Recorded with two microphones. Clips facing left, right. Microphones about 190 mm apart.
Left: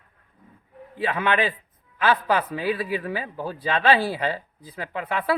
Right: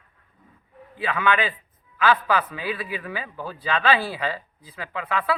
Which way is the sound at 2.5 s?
40° left (ahead or behind).